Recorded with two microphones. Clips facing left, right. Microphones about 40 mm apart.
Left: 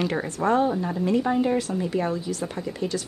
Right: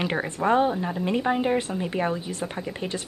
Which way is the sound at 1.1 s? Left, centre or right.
Right.